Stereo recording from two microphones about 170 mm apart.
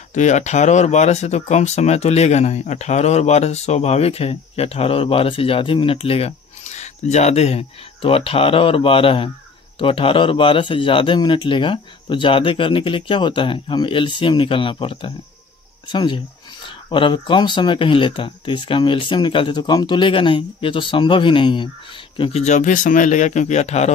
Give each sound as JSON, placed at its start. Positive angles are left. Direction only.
{"t": 0.1, "sound": "speech", "side_deg": 45}
{"t": 22.2, "sound": "speech", "side_deg": 40}